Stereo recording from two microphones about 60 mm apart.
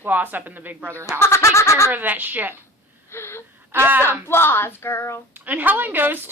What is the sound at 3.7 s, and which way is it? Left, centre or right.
Speech, right.